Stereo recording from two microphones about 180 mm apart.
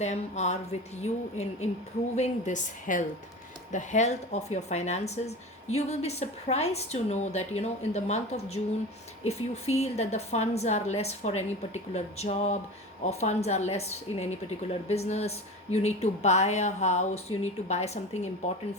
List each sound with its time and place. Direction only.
0.0 s speech: 40° left (ahead or behind)